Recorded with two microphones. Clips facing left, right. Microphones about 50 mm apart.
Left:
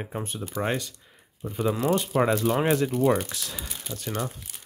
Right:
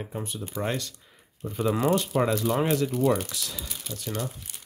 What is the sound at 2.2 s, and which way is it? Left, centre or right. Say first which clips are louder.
Speech: left 2 dB; left.